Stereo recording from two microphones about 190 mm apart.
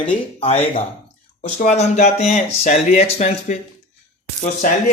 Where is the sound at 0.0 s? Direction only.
30° left (ahead or behind).